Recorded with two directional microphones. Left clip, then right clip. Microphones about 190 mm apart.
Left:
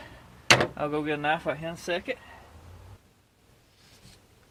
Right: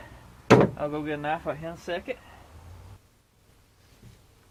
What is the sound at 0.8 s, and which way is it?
Speech, 50° left (ahead or behind).